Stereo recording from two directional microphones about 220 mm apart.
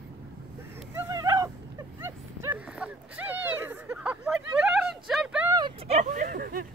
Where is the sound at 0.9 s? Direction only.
15° right (ahead or behind).